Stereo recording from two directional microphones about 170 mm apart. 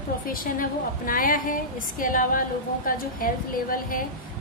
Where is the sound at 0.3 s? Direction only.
55° left (ahead or behind).